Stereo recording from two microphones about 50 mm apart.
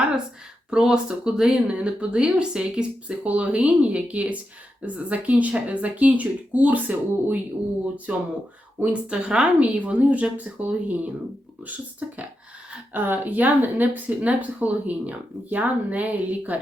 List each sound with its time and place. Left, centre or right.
0.7 s speech: centre
9.6 s speech: right